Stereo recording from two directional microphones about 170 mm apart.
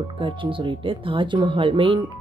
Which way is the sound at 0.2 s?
30° right (ahead or behind).